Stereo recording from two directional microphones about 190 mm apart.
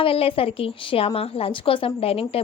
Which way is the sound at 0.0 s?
30° left (ahead or behind).